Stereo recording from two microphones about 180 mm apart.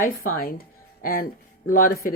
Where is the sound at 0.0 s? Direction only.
55° left (ahead or behind).